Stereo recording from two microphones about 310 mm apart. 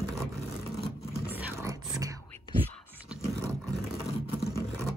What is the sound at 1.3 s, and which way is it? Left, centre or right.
Whispering, centre.